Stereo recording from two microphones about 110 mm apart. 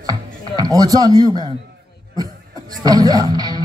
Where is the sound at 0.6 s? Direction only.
30° right (ahead or behind).